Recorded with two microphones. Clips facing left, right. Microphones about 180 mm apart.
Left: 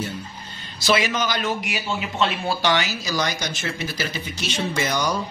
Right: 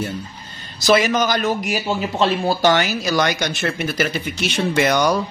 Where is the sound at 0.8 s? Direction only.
45° right (ahead or behind).